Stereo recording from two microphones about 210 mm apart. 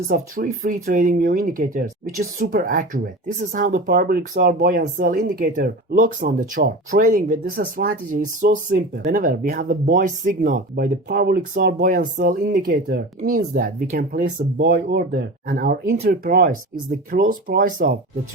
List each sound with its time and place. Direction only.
0.1 s speech: 40° right (ahead or behind)